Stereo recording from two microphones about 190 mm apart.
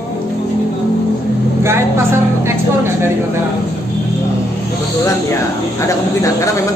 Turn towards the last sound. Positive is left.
turn(degrees=15)  # may be behind; listen again after turning